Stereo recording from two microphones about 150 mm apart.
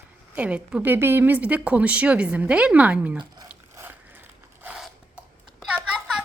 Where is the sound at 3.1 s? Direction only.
25° right (ahead or behind).